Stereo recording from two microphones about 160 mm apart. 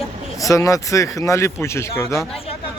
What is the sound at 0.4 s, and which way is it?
Speech, 20° left (ahead or behind).